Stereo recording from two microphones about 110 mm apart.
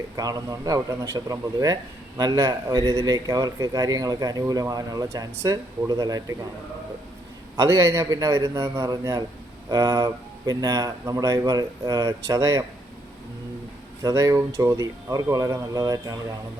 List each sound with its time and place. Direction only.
0.2 s a man's voice: 35° right (ahead or behind)
7.5 s a man's voice: 30° right (ahead or behind)
14.0 s a man's voice: 30° right (ahead or behind)